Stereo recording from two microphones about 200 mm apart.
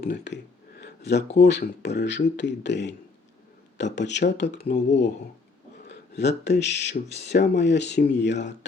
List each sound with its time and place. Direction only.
0.0 s speech: 55° left (ahead or behind)
0.8 s a sound: 55° left (ahead or behind)
1.4 s speech: 60° left (ahead or behind)
5.9 s speech: 60° left (ahead or behind)